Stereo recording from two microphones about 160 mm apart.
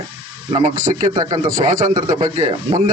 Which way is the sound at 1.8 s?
55° right (ahead or behind).